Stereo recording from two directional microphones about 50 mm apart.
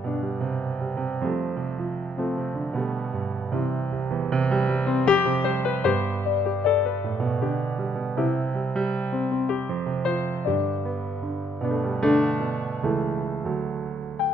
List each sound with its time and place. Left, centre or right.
4.3 s music: centre
8.2 s music: centre
11.6 s music: centre